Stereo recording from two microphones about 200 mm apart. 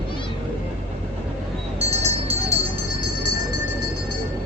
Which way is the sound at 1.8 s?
30° right (ahead or behind).